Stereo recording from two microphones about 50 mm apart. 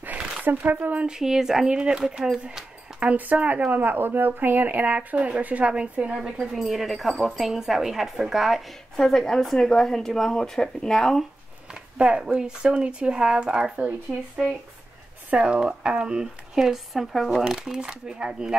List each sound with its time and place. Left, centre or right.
0.4 s speech: right
1.0 s speech: centre
1.7 s speech: centre
3.0 s speech: right
6.1 s speech: centre
8.9 s speech: centre
12.0 s speech: right